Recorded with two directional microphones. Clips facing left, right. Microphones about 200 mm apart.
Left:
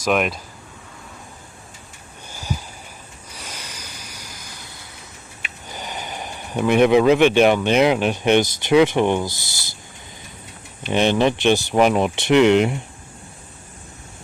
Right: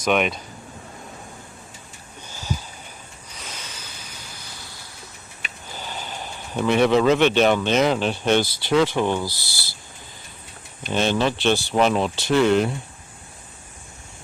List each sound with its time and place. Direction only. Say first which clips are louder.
0.0 s speech: left 1 dB; centre (ahead or behind)
2.3 s a sound: left 1 dB; 10° left (ahead or behind)
5.7 s speech: left 2 dB; 15° left (ahead or behind)
10.9 s speech: left 4 dB; 15° left (ahead or behind)